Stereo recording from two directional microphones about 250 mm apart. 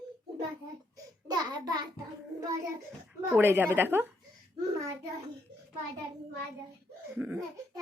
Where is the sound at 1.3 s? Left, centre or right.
Centre.